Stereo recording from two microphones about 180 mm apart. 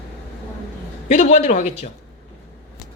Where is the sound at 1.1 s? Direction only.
40° left (ahead or behind).